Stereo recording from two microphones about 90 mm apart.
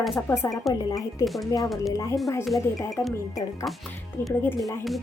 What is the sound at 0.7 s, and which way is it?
Speech, 50° left (ahead or behind).